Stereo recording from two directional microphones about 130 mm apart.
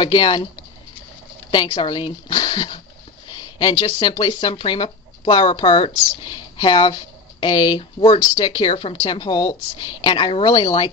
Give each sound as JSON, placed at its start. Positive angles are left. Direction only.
{"t": 0.0, "sound": "speech", "side_deg": 35}
{"t": 1.5, "sound": "speech", "side_deg": 35}